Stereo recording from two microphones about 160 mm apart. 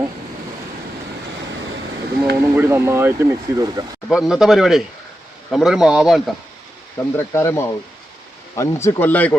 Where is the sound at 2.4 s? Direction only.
15° right (ahead or behind).